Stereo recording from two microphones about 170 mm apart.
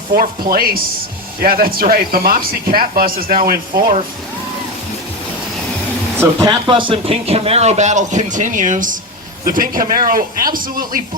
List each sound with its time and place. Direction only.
0.1 s speech: 65° right (ahead or behind)
6.1 s speech: 20° right (ahead or behind)
6.7 s speech: 30° right (ahead or behind); by 11.0 s 55° right (ahead or behind)